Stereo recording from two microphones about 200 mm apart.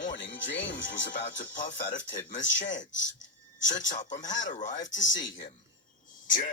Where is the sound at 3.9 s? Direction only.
35° left (ahead or behind).